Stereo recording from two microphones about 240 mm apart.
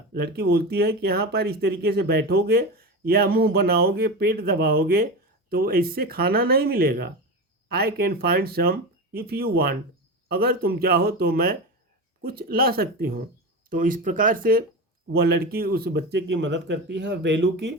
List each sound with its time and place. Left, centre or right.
0.1 s speech: right